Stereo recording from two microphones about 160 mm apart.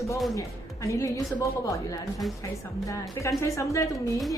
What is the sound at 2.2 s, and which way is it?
Speech, centre (ahead or behind).